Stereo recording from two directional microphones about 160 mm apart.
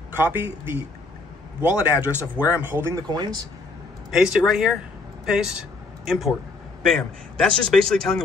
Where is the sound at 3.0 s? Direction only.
25° right (ahead or behind).